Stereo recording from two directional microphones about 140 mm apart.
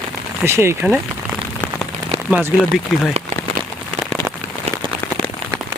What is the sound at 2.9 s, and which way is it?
Speech, centre (ahead or behind).